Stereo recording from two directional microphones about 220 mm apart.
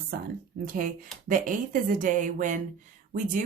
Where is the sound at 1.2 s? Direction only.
35° right (ahead or behind).